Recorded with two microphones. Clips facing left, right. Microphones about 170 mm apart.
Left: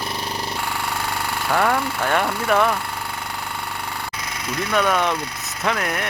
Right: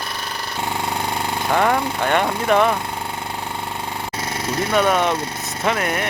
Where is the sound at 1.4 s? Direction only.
20° right (ahead or behind).